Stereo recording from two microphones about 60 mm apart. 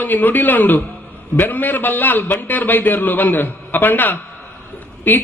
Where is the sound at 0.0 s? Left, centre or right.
Left.